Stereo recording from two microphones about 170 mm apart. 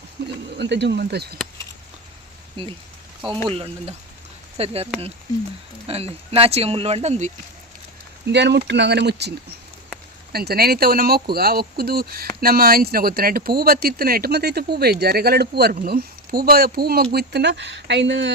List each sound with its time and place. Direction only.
0.5 s speech: 90° right; by 1.4 s 70° right (ahead or behind)
3.2 s speech: 30° right (ahead or behind)
5.9 s speech: 35° right (ahead or behind)
8.3 s speech: 85° right
10.3 s speech: 65° right (ahead or behind); by 18.3 s 90° right